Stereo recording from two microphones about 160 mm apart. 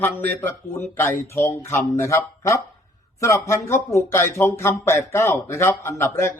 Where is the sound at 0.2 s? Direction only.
10° left (ahead or behind).